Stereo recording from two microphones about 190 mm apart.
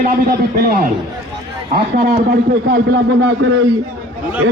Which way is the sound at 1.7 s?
55° right (ahead or behind).